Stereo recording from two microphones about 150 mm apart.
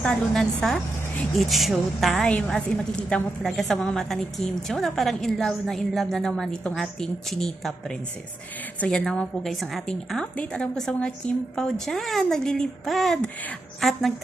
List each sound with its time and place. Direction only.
0.0 s a woman's voice: 5° left (ahead or behind)